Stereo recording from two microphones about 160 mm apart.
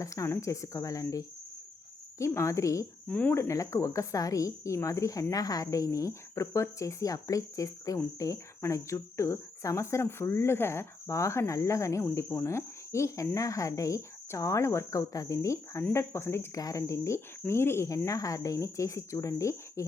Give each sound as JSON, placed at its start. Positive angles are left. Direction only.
{"t": 0.0, "sound": "a woman's voice", "side_deg": 20}